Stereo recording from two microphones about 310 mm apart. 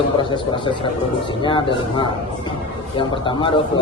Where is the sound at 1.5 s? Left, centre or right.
Centre.